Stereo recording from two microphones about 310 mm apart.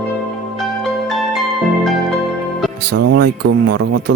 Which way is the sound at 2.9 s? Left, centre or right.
Right.